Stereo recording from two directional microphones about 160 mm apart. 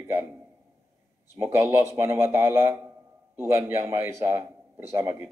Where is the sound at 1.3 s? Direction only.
15° right (ahead or behind).